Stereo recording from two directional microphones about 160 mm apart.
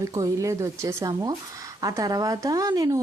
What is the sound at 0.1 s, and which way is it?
Speech, 20° right (ahead or behind).